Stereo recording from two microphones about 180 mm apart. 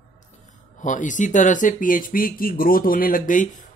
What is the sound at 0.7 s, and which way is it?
Speech, 45° left (ahead or behind).